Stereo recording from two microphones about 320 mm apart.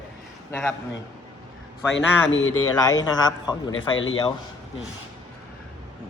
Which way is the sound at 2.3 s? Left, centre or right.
Left.